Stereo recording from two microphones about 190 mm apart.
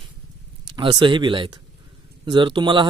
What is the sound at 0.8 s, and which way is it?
Speech, 25° right (ahead or behind).